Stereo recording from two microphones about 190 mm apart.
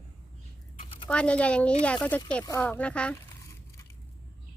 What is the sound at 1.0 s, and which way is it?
Speech, 5° left (ahead or behind).